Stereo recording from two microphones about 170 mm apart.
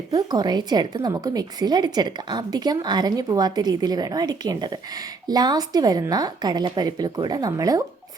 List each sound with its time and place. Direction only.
0.1 s a woman's voice: 20° right (ahead or behind)